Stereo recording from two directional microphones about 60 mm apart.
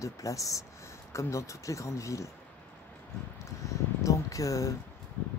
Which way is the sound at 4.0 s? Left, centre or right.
Left.